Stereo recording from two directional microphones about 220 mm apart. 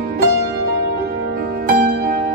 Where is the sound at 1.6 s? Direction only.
45° right (ahead or behind).